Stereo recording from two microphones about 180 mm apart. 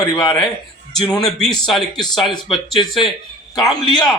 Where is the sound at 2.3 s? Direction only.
30° left (ahead or behind).